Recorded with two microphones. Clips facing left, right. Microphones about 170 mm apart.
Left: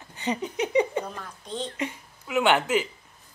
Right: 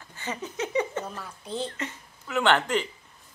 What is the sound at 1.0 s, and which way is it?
Speech, 5° right (ahead or behind).